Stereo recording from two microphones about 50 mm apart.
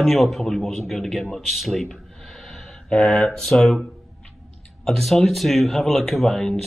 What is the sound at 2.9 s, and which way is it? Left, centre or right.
Mantra, centre.